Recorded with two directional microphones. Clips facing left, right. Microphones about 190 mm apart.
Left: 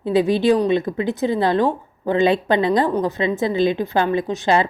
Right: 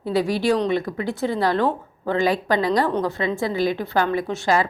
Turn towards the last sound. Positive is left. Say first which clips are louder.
# left 3 dB
turn(degrees=20)  # may be behind; listen again after turning